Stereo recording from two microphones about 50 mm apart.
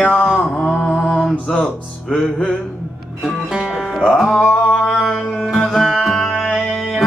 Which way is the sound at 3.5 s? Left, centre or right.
Centre.